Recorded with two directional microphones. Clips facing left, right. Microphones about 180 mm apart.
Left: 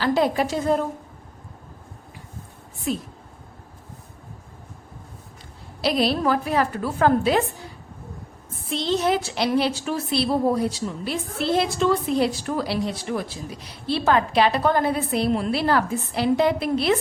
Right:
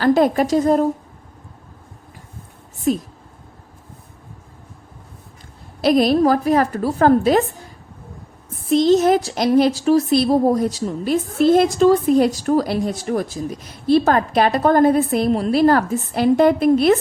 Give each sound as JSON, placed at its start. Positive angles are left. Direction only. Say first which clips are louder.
{"t": 0.0, "sound": "a woman's voice", "louder": "right 6 dB", "side_deg": -50}
{"t": 2.9, "sound": "a woman's voice", "louder": "right 7 dB", "side_deg": -45}
{"t": 5.8, "sound": "a woman's voice", "louder": "right 7 dB", "side_deg": -45}
{"t": 8.7, "sound": "a woman's voice", "louder": "right 9 dB", "side_deg": -45}